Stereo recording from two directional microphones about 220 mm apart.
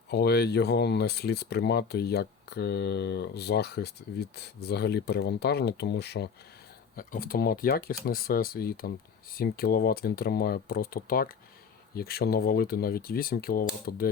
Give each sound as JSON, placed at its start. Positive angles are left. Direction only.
{"t": 0.1, "sound": "speech", "side_deg": 45}